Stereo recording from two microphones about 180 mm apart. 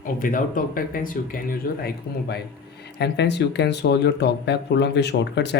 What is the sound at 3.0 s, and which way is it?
Speech, 70° left (ahead or behind).